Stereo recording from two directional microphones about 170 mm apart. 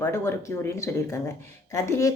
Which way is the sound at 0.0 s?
20° left (ahead or behind).